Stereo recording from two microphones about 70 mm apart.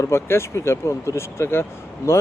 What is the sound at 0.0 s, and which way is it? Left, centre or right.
Speech, left.